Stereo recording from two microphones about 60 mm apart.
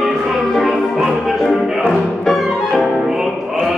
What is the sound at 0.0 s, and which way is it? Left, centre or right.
Music, centre.